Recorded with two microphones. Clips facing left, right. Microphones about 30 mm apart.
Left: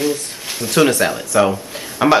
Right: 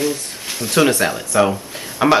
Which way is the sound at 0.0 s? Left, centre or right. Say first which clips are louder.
Left 1 dB; centre.